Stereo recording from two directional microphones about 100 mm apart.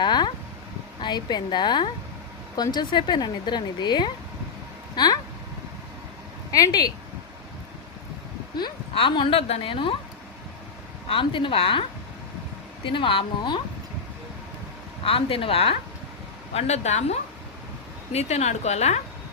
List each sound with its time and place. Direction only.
0.0 s a sound: 45° left (ahead or behind)
1.0 s a woman's voice: 45° left (ahead or behind)
6.5 s speech: 40° left (ahead or behind)
9.0 s speech: 60° left (ahead or behind)
11.1 s speech: 60° left (ahead or behind)
15.0 s a woman's voice: 70° left (ahead or behind)
16.6 s a woman's voice: 90° left